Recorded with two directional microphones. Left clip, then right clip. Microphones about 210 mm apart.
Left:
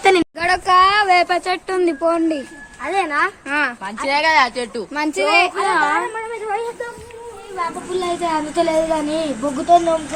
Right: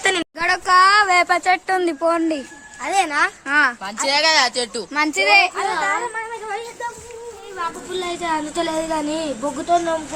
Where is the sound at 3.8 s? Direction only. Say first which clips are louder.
Even; 65° right (ahead or behind).